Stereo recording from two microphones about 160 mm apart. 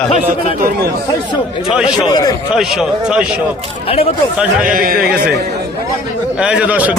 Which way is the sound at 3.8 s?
35° left (ahead or behind).